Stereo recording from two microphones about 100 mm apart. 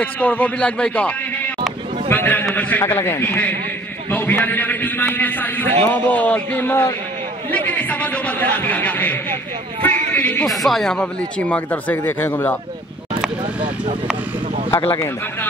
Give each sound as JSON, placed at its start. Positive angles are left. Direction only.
{"t": 0.0, "sound": "a man's voice", "side_deg": 15}
{"t": 9.8, "sound": "a sound", "side_deg": 15}
{"t": 10.5, "sound": "speech", "side_deg": 0}